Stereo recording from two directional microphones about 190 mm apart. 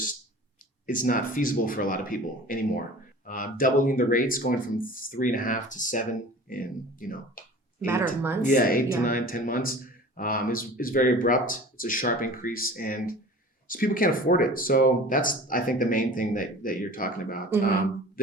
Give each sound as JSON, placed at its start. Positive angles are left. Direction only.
{"t": 0.9, "sound": "speech", "side_deg": 45}
{"t": 8.2, "sound": "speech", "side_deg": -10}
{"t": 8.4, "sound": "speech", "side_deg": 50}